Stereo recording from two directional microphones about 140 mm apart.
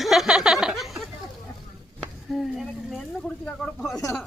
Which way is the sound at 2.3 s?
Centre (ahead or behind).